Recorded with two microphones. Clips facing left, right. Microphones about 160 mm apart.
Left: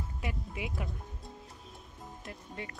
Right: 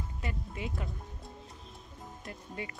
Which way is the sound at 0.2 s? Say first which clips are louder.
Even; 5° left (ahead or behind).